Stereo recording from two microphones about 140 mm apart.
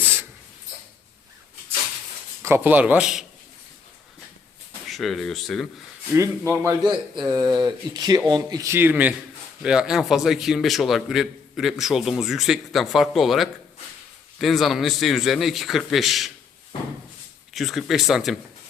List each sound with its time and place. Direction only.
2.4 s speech: 15° right (ahead or behind)
4.9 s a man's voice: centre (ahead or behind)
6.6 s a man's voice: 25° right (ahead or behind); by 16.3 s centre (ahead or behind)
17.5 s a man's voice: centre (ahead or behind)